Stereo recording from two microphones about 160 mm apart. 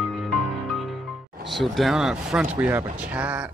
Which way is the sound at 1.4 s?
Centre (ahead or behind).